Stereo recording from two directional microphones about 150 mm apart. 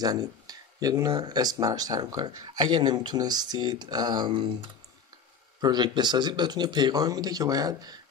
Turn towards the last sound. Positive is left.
turn(degrees=-25)  # may be behind; listen again after turning